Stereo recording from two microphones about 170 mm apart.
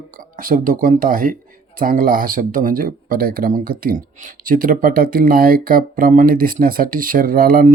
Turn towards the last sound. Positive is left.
turn(degrees=-55)  # may be behind; listen again after turning